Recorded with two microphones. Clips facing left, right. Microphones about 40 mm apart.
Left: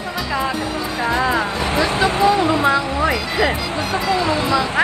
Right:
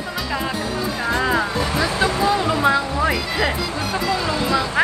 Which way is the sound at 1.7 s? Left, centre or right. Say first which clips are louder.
Left 4 dB; left.